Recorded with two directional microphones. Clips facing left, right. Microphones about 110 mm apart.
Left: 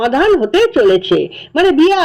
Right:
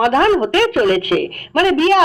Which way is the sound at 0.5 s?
25° left (ahead or behind).